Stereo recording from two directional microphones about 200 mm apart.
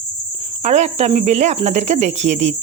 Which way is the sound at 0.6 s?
35° right (ahead or behind).